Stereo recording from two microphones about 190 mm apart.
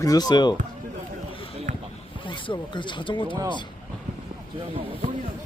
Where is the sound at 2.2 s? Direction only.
25° left (ahead or behind).